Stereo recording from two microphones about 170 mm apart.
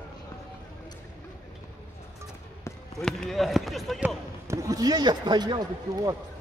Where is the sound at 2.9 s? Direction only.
Centre (ahead or behind).